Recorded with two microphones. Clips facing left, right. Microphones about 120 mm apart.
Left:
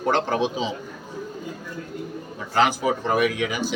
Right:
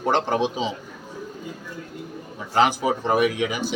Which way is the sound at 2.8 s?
25° right (ahead or behind).